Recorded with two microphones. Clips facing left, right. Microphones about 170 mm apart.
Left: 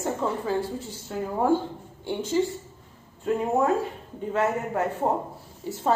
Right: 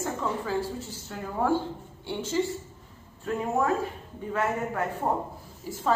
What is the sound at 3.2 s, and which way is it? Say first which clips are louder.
Speech: left 4 dB; 20° left (ahead or behind).